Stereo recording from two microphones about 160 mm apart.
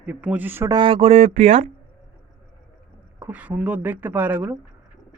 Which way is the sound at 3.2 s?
10° right (ahead or behind).